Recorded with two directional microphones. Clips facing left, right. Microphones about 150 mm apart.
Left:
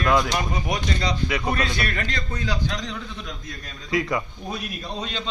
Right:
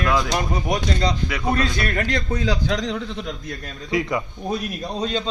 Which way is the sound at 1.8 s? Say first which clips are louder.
Right 4 dB; 50° right (ahead or behind).